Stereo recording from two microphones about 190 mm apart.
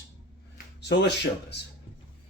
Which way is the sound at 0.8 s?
65° left (ahead or behind).